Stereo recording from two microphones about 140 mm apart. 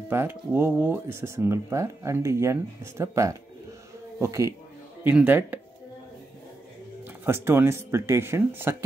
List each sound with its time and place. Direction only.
0.1 s speech: 15° right (ahead or behind)
7.2 s speech: 15° right (ahead or behind)